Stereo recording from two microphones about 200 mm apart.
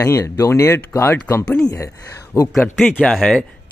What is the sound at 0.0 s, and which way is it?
Speech, 15° left (ahead or behind).